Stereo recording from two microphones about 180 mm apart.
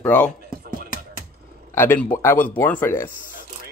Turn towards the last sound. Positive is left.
turn(degrees=10)  # may be behind; listen again after turning